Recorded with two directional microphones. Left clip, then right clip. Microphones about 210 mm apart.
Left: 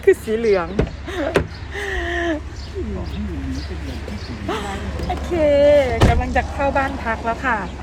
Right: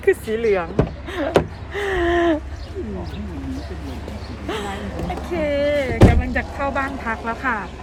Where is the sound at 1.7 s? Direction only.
30° right (ahead or behind).